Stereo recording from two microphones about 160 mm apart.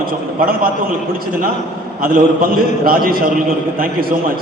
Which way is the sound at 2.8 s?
65° right (ahead or behind).